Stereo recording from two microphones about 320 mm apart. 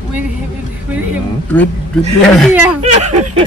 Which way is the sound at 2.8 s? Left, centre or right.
Right.